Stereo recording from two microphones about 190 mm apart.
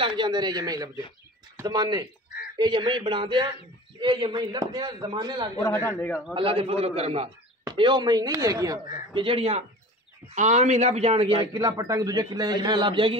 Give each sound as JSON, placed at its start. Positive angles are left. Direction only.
{"t": 0.0, "sound": "a man's voice", "side_deg": -25}
{"t": 5.6, "sound": "a man's voice", "side_deg": 15}
{"t": 6.3, "sound": "a man's voice", "side_deg": -30}
{"t": 11.5, "sound": "a man's voice", "side_deg": -15}